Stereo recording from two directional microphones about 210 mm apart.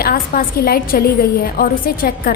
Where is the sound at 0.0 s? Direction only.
45° left (ahead or behind).